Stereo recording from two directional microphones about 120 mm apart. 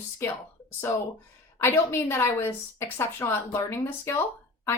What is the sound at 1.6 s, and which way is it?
A woman's voice, 20° left (ahead or behind).